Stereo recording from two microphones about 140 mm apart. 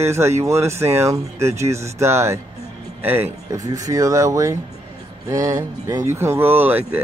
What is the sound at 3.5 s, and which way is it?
Speech, 25° right (ahead or behind).